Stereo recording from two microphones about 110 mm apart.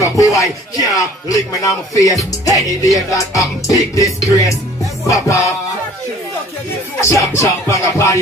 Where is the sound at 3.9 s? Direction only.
30° left (ahead or behind).